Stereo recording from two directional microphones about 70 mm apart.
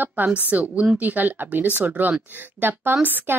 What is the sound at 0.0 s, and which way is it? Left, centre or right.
A woman's voice, right.